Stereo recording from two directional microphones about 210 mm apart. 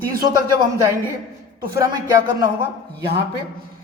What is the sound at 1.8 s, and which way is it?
Speech, 15° right (ahead or behind).